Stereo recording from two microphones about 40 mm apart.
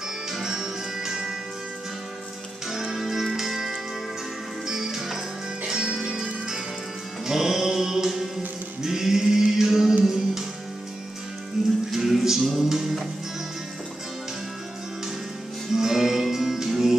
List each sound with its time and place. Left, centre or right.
0.3 s music: centre
2.7 s music: centre
8.8 s a sound: centre
10.0 s music: centre
11.6 s music: centre
15.7 s music: centre